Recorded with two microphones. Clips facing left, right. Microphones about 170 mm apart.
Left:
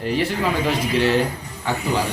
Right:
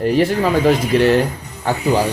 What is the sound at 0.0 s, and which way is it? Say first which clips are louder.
Speech: right 6 dB; 45° right (ahead or behind).